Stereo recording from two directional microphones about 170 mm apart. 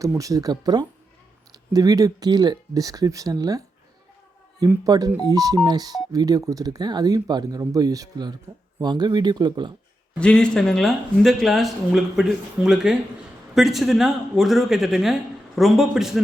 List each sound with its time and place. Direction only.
0.0 s speech: 20° right (ahead or behind)
4.7 s speech: 20° right (ahead or behind)
10.2 s speech: 5° left (ahead or behind)